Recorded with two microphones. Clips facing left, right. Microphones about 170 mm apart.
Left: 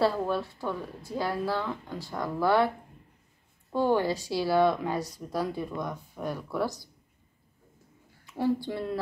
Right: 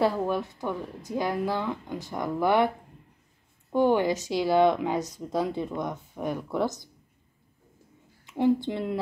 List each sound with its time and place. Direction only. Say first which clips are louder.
0.0 s a woman's voice: right 1 dB; 15° right (ahead or behind)
3.7 s speech: right 3 dB; 20° right (ahead or behind)
8.3 s speech: right 4 dB; 20° right (ahead or behind)